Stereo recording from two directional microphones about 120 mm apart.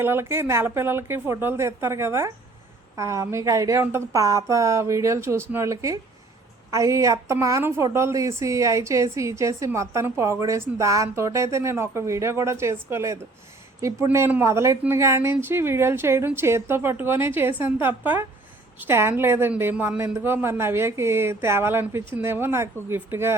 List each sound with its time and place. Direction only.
0.0 s a woman's voice: 20° right (ahead or behind)
19.7 s speech: 10° right (ahead or behind)
20.0 s a woman's voice: 20° right (ahead or behind)